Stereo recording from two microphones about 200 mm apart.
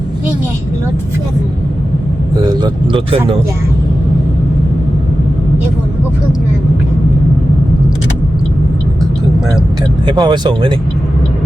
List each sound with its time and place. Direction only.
2.4 s speech: 20° right (ahead or behind)
10.1 s speech: 20° right (ahead or behind)